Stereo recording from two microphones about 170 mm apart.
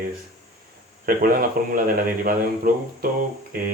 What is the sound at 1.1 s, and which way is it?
Speech, 55° right (ahead or behind).